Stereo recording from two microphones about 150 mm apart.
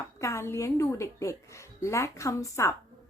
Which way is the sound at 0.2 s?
20° left (ahead or behind).